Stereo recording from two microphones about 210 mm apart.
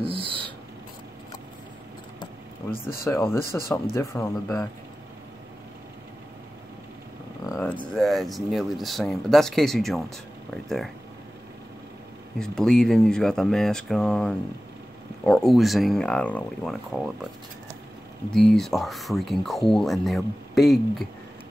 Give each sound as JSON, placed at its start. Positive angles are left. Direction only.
{"t": 0.0, "sound": "a sound", "side_deg": -25}
{"t": 2.7, "sound": "speech", "side_deg": 45}
{"t": 3.1, "sound": "speech", "side_deg": 10}
{"t": 7.9, "sound": "speech", "side_deg": 0}
{"t": 12.4, "sound": "speech", "side_deg": 5}
{"t": 18.3, "sound": "speech", "side_deg": 0}